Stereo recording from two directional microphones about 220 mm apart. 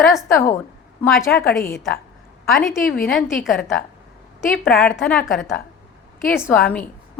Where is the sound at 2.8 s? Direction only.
40° left (ahead or behind).